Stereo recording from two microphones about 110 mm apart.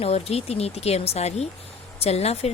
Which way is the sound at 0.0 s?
70° left (ahead or behind).